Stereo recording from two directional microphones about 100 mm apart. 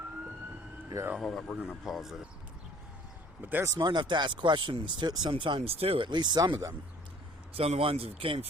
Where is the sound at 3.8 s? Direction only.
50° right (ahead or behind).